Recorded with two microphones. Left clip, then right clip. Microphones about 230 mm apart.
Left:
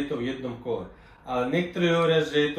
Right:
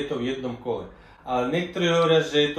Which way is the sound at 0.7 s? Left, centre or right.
Centre.